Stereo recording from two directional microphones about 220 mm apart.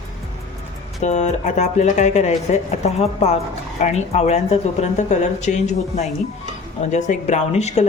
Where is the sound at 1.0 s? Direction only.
30° left (ahead or behind).